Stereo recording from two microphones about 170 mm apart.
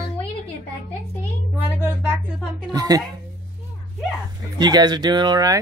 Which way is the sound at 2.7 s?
25° right (ahead or behind).